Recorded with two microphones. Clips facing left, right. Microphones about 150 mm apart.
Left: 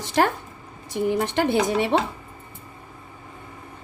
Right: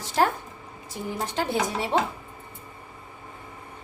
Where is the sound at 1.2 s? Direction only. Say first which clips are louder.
Left 1 dB; 70° left (ahead or behind).